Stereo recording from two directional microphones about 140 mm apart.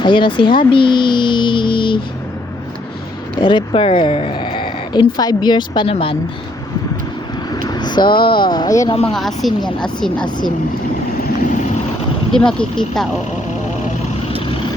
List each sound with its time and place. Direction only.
0.0 s speech: 35° left (ahead or behind)
3.4 s speech: 35° left (ahead or behind)
7.7 s speech: 30° left (ahead or behind)
9.1 s speech: centre (ahead or behind)
10.2 s speech: 30° left (ahead or behind)
11.4 s vehicle: 60° left (ahead or behind)
12.3 s speech: 5° left (ahead or behind)